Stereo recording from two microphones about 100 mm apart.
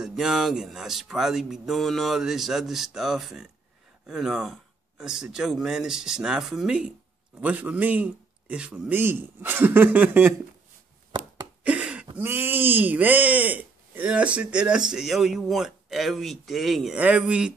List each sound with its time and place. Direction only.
0.0 s speech: 5° right (ahead or behind)
11.6 s a sound: 10° right (ahead or behind)
12.2 s speech: 20° right (ahead or behind); by 16.9 s centre (ahead or behind)
16.9 s speech: 10° right (ahead or behind)